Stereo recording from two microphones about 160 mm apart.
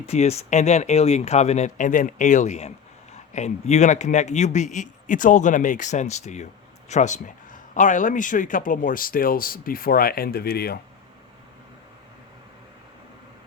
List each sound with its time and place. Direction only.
0.0 s a man's voice: 40° left (ahead or behind); by 10.8 s 75° left (ahead or behind)